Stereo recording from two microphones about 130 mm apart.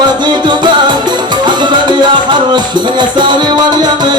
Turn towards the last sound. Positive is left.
turn(degrees=-35)  # may be behind; listen again after turning